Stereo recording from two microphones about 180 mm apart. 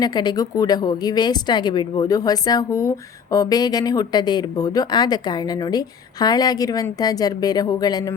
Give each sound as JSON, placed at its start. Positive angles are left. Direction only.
{"t": 0.0, "sound": "speech", "side_deg": 25}